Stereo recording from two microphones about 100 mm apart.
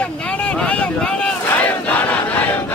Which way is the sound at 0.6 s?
10° left (ahead or behind).